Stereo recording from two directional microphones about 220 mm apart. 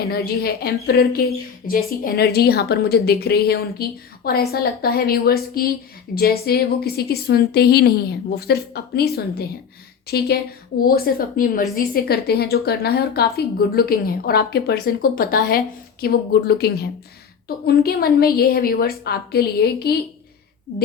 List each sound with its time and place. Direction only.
0.0 s a woman's voice: 45° left (ahead or behind)
10.1 s a woman's voice: 45° left (ahead or behind)